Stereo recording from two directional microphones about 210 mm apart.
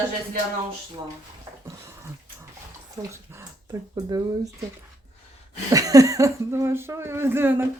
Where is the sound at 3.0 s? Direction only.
15° right (ahead or behind).